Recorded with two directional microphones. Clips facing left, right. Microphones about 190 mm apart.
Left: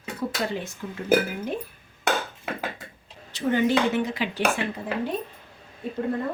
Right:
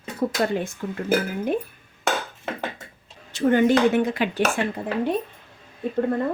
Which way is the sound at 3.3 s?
50° right (ahead or behind).